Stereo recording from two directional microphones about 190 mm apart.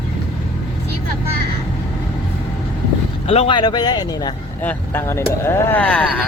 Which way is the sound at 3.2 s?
30° left (ahead or behind).